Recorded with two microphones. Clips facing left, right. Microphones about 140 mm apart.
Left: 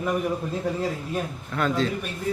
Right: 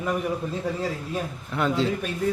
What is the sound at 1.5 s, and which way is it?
Speech, 20° right (ahead or behind).